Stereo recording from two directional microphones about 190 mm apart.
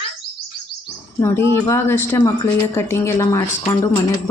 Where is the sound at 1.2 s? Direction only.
15° left (ahead or behind).